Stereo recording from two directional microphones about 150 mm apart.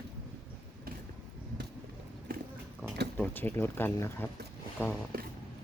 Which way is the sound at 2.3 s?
80° right.